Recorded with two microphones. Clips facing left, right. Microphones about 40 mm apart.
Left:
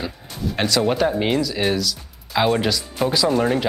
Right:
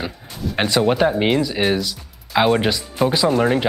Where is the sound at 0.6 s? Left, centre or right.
Right.